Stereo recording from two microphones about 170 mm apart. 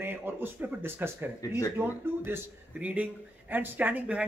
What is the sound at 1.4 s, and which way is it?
Speech, 20° left (ahead or behind).